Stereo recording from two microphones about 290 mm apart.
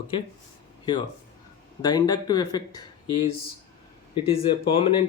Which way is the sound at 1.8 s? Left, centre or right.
Centre.